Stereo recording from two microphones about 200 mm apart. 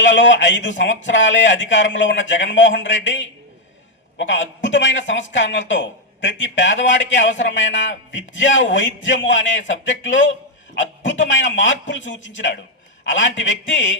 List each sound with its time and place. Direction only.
0.0 s a man's voice: 65° left (ahead or behind)